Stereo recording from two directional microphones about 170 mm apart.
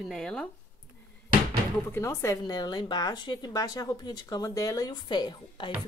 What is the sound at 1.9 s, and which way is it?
Speech, 15° left (ahead or behind).